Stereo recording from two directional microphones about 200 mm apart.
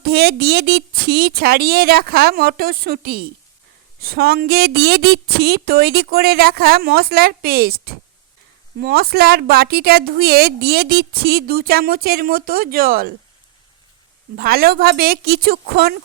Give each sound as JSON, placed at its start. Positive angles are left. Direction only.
{"t": 0.0, "sound": "a woman's voice", "side_deg": -50}
{"t": 14.3, "sound": "a woman's voice", "side_deg": -50}